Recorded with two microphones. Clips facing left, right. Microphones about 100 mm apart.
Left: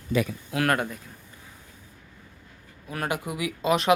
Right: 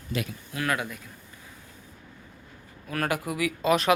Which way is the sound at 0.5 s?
90° left.